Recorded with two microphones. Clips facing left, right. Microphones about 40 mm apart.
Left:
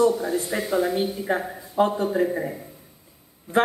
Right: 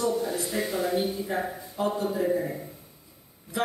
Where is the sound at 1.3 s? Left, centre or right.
Left.